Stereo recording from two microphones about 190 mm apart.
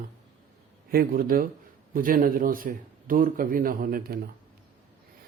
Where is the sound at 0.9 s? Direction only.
50° right (ahead or behind).